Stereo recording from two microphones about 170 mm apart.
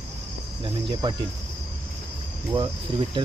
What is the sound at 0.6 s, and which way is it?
Cricket, 30° right (ahead or behind).